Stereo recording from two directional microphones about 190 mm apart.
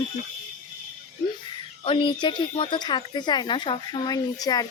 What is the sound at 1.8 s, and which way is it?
Speech, 25° left (ahead or behind).